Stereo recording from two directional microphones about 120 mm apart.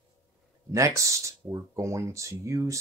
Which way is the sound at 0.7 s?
25° right (ahead or behind).